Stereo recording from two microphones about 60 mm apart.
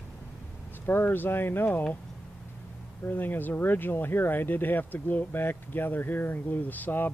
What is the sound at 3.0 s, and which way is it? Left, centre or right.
Speech, left.